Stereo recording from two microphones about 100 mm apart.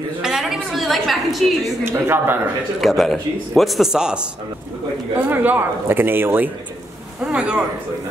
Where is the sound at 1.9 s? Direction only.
20° right (ahead or behind).